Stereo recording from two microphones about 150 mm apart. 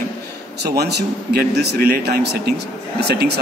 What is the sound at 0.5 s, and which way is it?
A man's voice, 90° right.